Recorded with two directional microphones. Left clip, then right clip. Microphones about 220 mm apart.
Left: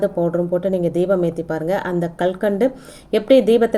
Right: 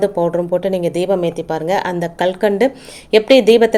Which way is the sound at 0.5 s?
15° right (ahead or behind).